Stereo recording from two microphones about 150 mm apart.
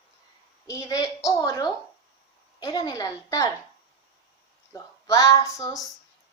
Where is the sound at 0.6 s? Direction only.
20° left (ahead or behind).